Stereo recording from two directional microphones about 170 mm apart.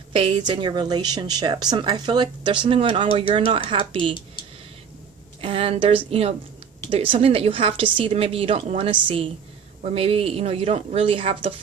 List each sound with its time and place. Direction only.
0.1 s a woman's voice: 30° right (ahead or behind)
5.4 s a woman's voice: 35° right (ahead or behind)